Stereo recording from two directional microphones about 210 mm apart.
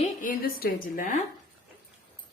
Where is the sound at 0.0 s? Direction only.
40° left (ahead or behind).